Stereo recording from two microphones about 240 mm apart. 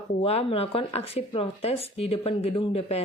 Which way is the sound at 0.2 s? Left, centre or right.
Left.